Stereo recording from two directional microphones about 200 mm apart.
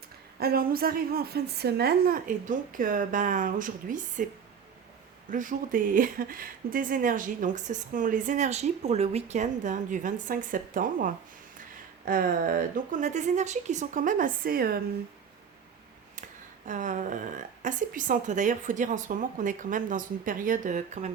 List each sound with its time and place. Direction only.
0.3 s a woman's voice: 50° right (ahead or behind)
5.3 s speech: 40° right (ahead or behind)
16.6 s speech: 40° right (ahead or behind)